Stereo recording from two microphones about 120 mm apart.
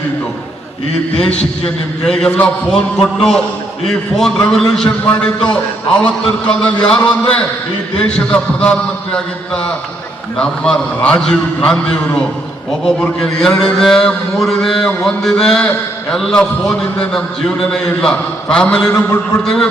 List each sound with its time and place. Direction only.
1.1 s a man's voice: 5° left (ahead or behind)
10.3 s a man's voice: 5° left (ahead or behind)
12.8 s a man's voice: 5° left (ahead or behind)
18.9 s a man's voice: 25° left (ahead or behind)
19.4 s a man's voice: 5° left (ahead or behind)